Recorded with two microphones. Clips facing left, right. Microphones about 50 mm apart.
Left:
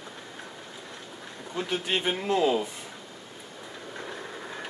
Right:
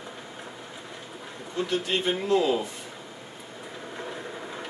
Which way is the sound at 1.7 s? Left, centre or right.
Left.